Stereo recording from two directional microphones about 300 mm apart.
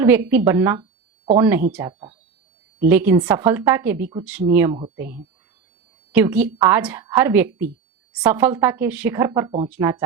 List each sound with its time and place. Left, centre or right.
0.0 s a woman's voice: centre
0.8 s a sound: centre
1.4 s a woman's voice: centre
2.8 s a woman's voice: centre